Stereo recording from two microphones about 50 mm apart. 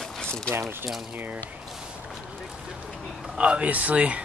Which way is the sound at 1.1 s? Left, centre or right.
Right.